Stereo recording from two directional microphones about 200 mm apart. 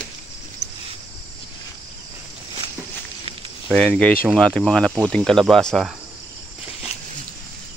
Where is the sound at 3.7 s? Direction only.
5° left (ahead or behind).